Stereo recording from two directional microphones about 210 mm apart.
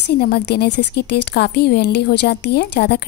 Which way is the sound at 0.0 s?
50° left (ahead or behind).